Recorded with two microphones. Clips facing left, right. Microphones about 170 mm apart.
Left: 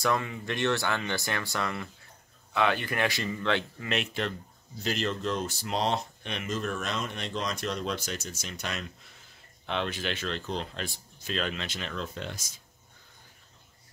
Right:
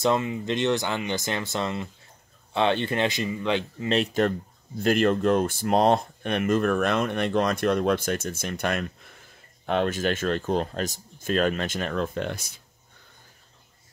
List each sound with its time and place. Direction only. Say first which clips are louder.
0.0 s speech: right 5 dB; 20° right (ahead or behind)
3.9 s speech: right 8 dB; 40° right (ahead or behind)
4.7 s speech: right 10 dB; 55° right (ahead or behind)